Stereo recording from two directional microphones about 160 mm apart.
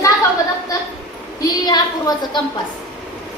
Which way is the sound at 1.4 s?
25° left (ahead or behind).